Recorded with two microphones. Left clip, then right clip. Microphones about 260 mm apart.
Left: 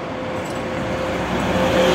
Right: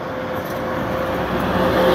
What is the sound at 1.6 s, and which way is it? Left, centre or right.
Vehicle, left.